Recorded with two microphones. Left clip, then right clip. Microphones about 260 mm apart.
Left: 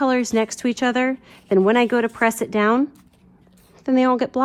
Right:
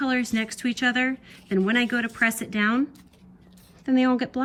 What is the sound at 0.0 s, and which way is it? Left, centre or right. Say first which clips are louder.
Speech: left 7 dB; centre.